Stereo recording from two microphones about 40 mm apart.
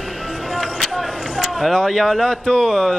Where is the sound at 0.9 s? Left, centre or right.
Centre.